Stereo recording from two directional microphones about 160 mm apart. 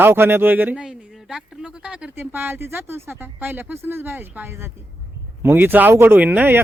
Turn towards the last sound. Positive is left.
turn(degrees=-10)  # may be behind; listen again after turning